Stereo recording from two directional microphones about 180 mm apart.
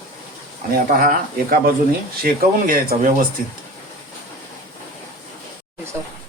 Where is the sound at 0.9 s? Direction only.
50° right (ahead or behind).